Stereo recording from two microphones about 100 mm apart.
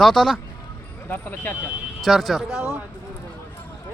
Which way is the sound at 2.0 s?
Centre (ahead or behind).